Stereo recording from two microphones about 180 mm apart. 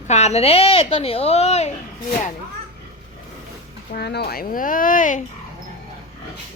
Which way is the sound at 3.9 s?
65° left (ahead or behind).